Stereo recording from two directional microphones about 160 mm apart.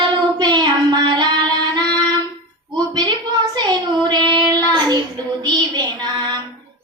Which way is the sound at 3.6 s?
25° right (ahead or behind).